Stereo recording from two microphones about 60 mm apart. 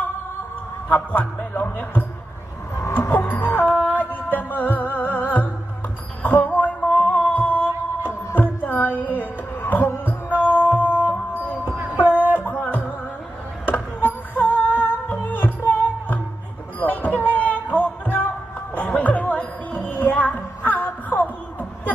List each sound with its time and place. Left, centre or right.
0.8 s a man's voice: left
2.9 s music: left
6.2 s a sound: left
7.2 s music: left
10.4 s music: centre
12.4 s music: left
13.9 s music: left
16.8 s a sound: left
17.8 s music: left